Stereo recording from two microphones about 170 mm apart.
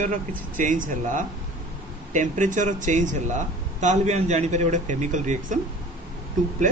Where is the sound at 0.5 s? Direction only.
50° right (ahead or behind).